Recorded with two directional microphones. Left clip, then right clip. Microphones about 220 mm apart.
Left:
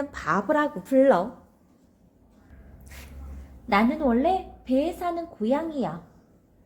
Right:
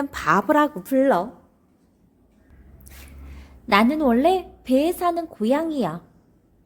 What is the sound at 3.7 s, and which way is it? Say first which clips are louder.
A woman's voice: right 4 dB; 50° right (ahead or behind).